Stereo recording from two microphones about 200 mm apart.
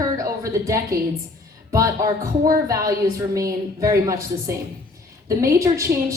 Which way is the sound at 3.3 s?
15° right (ahead or behind).